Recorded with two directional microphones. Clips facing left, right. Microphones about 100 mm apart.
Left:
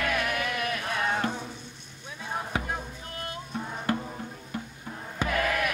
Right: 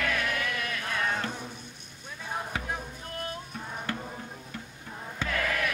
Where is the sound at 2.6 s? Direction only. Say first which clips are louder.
Left 1 dB; centre (ahead or behind).